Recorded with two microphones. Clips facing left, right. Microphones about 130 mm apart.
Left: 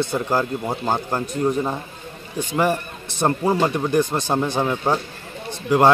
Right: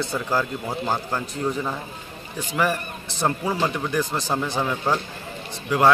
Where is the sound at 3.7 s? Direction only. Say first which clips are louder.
Left 5 dB; 25° left (ahead or behind).